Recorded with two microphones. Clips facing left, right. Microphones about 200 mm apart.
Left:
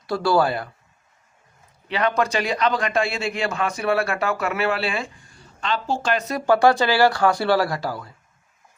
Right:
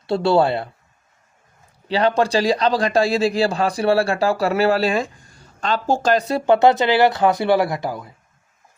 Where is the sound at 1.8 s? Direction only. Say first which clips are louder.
Right 4 dB; 30° right (ahead or behind).